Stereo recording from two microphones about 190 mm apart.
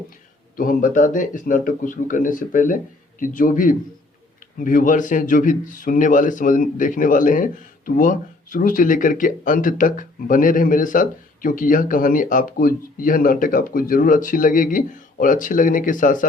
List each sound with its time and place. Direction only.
0.5 s speech: 50° left (ahead or behind)